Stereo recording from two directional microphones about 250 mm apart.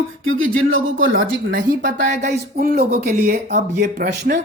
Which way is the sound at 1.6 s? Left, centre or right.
Right.